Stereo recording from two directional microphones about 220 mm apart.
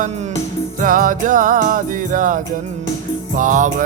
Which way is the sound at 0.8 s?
40° right (ahead or behind).